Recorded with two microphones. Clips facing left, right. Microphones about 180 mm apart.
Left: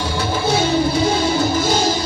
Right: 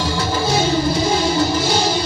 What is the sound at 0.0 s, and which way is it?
Music, 60° left (ahead or behind).